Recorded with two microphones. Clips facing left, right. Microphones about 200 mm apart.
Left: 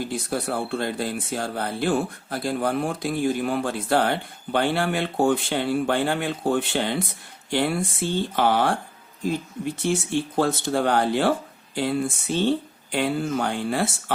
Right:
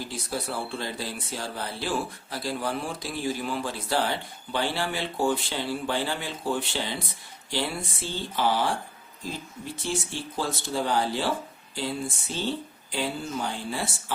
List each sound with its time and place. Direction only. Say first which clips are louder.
0.0 s speech: left 6 dB; 55° left (ahead or behind)
9.8 s speech: left 8 dB; 60° left (ahead or behind)